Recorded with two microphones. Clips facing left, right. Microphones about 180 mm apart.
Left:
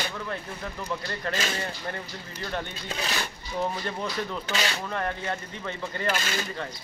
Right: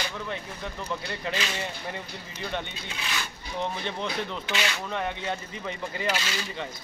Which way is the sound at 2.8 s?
40° left (ahead or behind).